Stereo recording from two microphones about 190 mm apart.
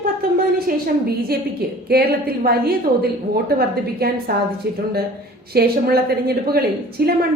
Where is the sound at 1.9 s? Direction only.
55° right (ahead or behind).